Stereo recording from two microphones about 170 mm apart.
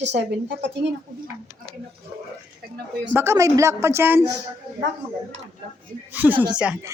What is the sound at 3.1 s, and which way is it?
A man's voice, 15° right (ahead or behind).